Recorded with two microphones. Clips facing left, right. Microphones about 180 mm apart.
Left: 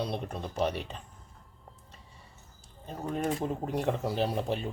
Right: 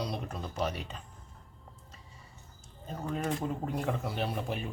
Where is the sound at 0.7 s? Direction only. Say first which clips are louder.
Left 3 dB; centre (ahead or behind).